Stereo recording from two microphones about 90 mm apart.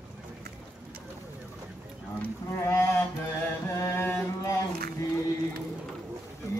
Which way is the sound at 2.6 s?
25° left (ahead or behind).